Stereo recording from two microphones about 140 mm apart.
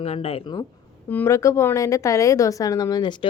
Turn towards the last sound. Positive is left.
turn(degrees=30)  # may be behind; listen again after turning